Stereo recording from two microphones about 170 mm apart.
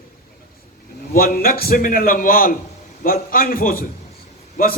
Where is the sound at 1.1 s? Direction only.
60° left (ahead or behind).